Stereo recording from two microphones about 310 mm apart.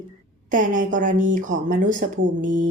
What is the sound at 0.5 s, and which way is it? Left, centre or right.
A woman's voice, right.